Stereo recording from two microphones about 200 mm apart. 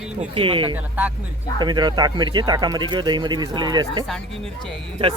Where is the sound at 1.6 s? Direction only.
20° right (ahead or behind).